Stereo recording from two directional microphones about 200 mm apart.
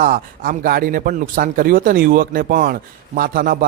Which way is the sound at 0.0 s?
45° right (ahead or behind).